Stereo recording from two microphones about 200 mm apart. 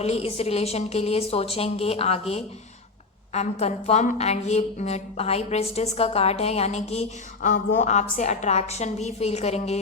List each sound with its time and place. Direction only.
0.0 s a woman's voice: 30° left (ahead or behind)